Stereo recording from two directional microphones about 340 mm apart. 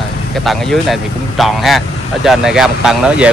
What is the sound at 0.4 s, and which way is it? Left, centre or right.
Speech, centre.